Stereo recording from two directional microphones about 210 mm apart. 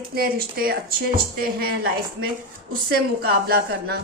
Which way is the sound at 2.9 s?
45° right (ahead or behind).